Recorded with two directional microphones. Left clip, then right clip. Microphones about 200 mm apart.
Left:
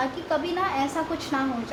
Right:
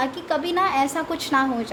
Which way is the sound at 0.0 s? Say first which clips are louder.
Right 2 dB; 55° right (ahead or behind).